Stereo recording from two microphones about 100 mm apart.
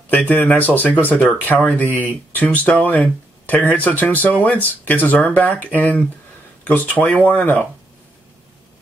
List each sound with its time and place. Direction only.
0.1 s speech: 15° left (ahead or behind)
6.7 s speech: 15° left (ahead or behind)